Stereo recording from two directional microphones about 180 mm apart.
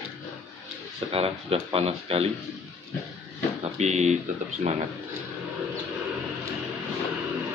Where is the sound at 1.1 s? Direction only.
35° right (ahead or behind).